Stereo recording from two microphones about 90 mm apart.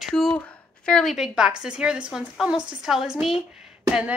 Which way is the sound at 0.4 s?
10° left (ahead or behind).